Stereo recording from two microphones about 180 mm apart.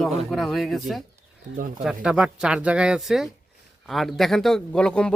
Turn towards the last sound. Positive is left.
turn(degrees=5)  # may be behind; listen again after turning